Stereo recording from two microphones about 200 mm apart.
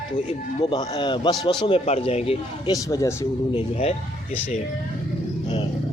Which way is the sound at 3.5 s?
30° left (ahead or behind).